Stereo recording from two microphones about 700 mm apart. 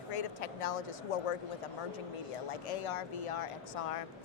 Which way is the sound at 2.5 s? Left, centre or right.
Left.